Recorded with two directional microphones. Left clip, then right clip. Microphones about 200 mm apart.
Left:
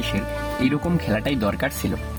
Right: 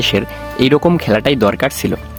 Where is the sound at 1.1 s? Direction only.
35° right (ahead or behind).